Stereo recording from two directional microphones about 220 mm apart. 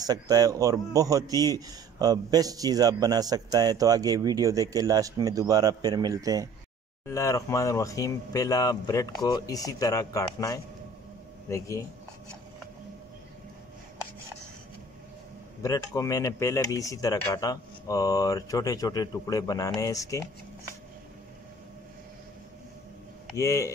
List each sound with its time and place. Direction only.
0.0 s a man's voice: 15° right (ahead or behind)
7.1 s speech: 15° left (ahead or behind)
15.6 s speech: 15° left (ahead or behind)
23.3 s speech: 15° left (ahead or behind)